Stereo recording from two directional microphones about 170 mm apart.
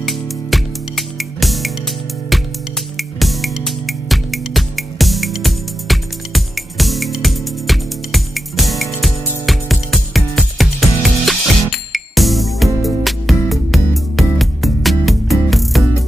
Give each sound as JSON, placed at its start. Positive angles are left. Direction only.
{"t": 0.0, "sound": "music", "side_deg": 0}
{"t": 3.0, "sound": "music", "side_deg": 0}